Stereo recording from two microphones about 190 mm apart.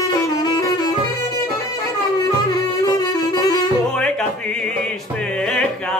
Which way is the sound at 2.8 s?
20° left (ahead or behind).